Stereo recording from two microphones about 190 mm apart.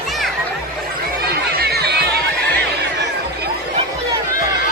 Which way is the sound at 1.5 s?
55° right (ahead or behind).